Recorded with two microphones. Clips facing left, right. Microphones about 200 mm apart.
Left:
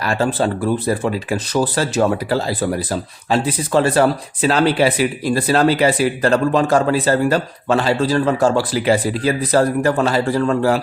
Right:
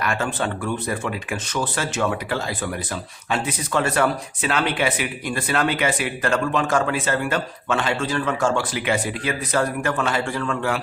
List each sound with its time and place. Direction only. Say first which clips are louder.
0.0 s speech: left 6 dB; 35° left (ahead or behind)